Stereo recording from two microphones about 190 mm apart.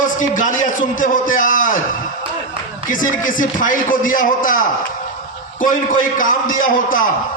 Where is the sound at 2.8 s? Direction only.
45° left (ahead or behind).